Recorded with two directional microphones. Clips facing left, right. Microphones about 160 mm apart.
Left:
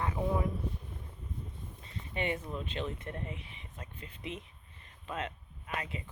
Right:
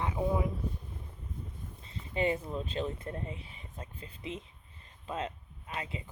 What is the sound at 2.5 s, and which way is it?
Speech, 35° right (ahead or behind).